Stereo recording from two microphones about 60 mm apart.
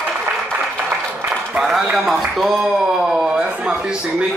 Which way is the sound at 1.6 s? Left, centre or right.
Centre.